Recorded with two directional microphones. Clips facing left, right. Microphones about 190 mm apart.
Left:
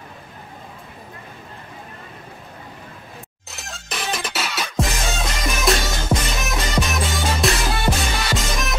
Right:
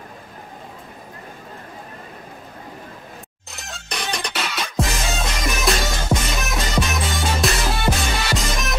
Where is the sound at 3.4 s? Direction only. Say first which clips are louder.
Right 1 dB; centre (ahead or behind).